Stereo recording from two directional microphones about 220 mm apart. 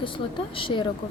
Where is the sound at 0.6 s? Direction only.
20° left (ahead or behind).